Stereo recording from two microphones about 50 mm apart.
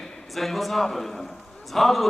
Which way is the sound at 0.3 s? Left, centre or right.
Centre.